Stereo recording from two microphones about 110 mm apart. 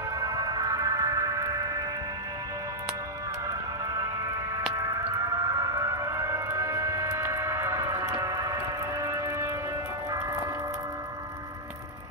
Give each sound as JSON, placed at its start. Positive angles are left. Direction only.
{"t": 0.2, "sound": "music", "side_deg": -35}
{"t": 4.7, "sound": "music", "side_deg": -30}
{"t": 7.1, "sound": "squish", "side_deg": -25}